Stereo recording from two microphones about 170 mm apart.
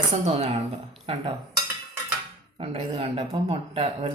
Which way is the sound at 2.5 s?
35° right (ahead or behind).